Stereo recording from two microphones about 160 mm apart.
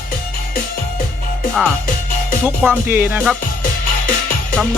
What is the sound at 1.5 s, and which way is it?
Speech, 5° left (ahead or behind).